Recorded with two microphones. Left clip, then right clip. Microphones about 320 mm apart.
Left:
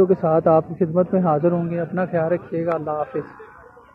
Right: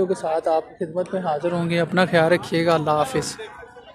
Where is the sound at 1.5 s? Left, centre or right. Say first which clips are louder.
Right 3 dB; right.